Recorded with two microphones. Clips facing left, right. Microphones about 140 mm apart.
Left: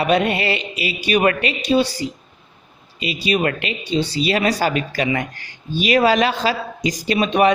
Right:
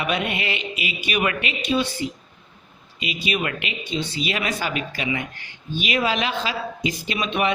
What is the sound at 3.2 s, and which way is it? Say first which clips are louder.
Speech: left 7 dB; 35° left (ahead or behind).